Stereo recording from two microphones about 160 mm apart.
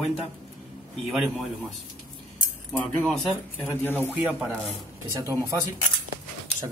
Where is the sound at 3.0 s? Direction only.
5° left (ahead or behind).